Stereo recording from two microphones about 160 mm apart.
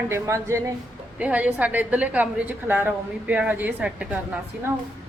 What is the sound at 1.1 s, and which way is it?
A woman's voice, 10° right (ahead or behind).